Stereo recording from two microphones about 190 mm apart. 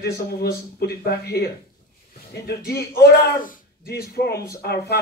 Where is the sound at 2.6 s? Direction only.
55° left (ahead or behind).